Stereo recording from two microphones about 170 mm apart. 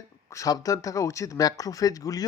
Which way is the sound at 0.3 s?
20° left (ahead or behind).